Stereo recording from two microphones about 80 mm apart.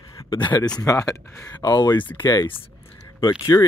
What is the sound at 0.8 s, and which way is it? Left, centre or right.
Speech, left.